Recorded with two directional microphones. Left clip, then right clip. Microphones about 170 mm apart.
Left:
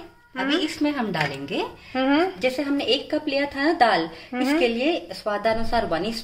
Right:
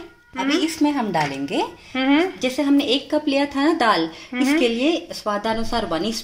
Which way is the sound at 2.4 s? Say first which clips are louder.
Right 3 dB; 45° right (ahead or behind).